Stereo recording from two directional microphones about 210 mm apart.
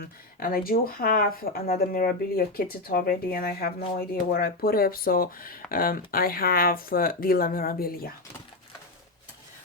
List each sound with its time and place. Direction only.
0.0 s speech: 45° left (ahead or behind)